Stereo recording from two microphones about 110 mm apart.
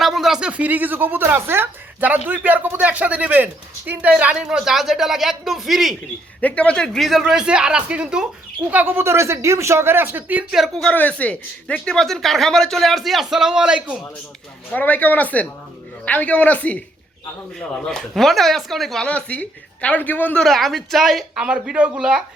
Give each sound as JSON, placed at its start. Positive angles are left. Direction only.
{"t": 0.0, "sound": "speech", "side_deg": 0}
{"t": 6.4, "sound": "speech", "side_deg": 10}
{"t": 10.5, "sound": "speech", "side_deg": -5}
{"t": 10.8, "sound": "speech", "side_deg": 15}
{"t": 14.7, "sound": "speech", "side_deg": 15}
{"t": 20.4, "sound": "speech", "side_deg": 0}